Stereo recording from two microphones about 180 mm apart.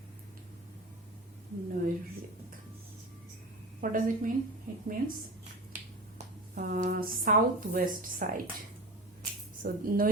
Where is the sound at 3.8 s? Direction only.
50° right (ahead or behind).